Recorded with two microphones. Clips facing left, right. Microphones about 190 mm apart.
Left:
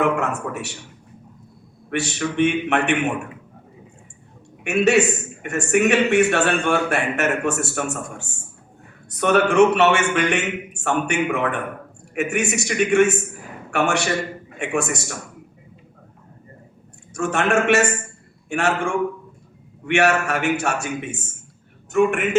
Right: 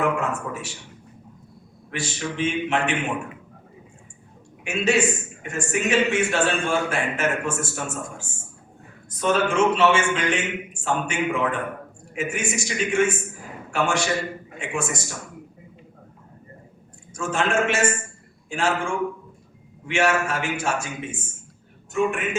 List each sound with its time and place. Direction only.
0.2 s a man's voice: 65° left (ahead or behind)
1.9 s a man's voice: 65° left (ahead or behind)
4.6 s a man's voice: 65° left (ahead or behind)
17.2 s a man's voice: 65° left (ahead or behind)
19.8 s a man's voice: 65° left (ahead or behind)